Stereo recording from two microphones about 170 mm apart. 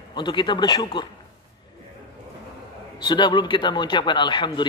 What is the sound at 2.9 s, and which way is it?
Speech, 25° left (ahead or behind).